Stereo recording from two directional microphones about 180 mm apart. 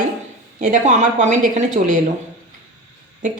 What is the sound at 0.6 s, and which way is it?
A woman's voice, 45° right (ahead or behind).